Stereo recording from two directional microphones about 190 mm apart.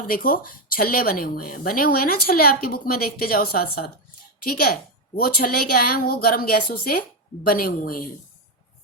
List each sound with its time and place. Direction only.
0.1 s a woman's voice: 50° left (ahead or behind)